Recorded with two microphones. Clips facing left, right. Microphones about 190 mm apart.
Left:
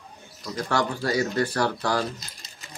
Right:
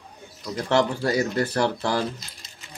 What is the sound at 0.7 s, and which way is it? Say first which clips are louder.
A man's voice: right 4 dB; 25° right (ahead or behind).